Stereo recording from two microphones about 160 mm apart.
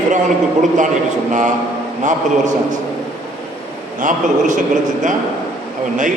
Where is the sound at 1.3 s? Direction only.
50° right (ahead or behind).